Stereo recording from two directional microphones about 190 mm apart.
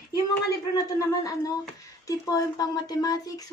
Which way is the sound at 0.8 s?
20° left (ahead or behind).